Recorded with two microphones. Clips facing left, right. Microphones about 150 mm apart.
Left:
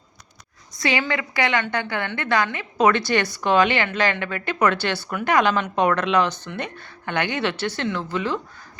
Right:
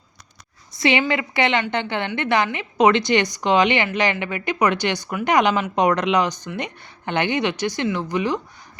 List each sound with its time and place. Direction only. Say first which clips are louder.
0.8 s a woman's voice: right 4 dB; 25° right (ahead or behind)